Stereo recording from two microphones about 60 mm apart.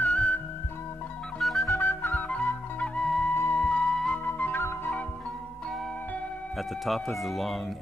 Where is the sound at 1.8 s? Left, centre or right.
Left; by 4.1 s centre.